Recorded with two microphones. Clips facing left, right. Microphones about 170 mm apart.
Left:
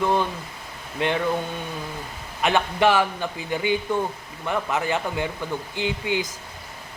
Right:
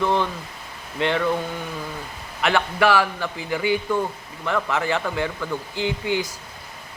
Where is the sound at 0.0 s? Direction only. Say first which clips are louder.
Even; 15° left (ahead or behind).